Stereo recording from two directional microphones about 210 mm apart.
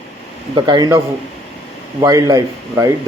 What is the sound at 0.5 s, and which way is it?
A man's voice, 20° right (ahead or behind).